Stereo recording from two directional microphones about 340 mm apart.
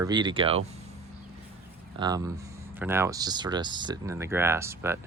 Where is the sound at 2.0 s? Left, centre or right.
Centre.